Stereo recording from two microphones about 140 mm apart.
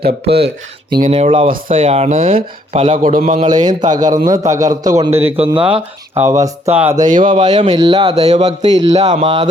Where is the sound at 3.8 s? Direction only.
65° right (ahead or behind).